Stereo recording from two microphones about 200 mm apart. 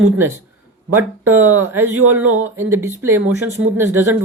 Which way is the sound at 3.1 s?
90° right.